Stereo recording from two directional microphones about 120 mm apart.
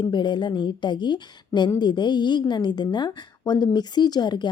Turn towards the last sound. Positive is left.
turn(degrees=35)  # may be behind; listen again after turning